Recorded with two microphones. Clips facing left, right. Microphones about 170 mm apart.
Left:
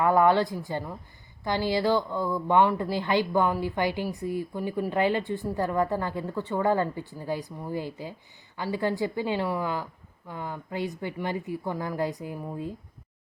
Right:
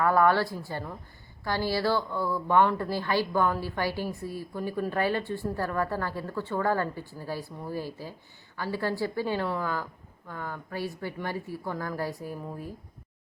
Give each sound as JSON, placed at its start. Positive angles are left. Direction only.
{"t": 0.0, "sound": "speech", "side_deg": 20}